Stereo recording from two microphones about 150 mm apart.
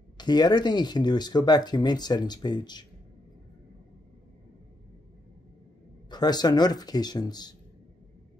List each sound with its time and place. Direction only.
0.2 s speech: 30° left (ahead or behind)
6.0 s speech: 25° left (ahead or behind)